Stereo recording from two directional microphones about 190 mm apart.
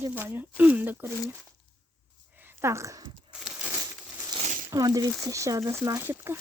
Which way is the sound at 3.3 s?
5° right (ahead or behind).